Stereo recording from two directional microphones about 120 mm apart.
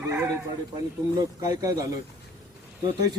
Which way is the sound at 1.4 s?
30° right (ahead or behind).